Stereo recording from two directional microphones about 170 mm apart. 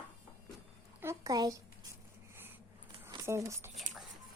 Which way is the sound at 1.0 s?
20° right (ahead or behind).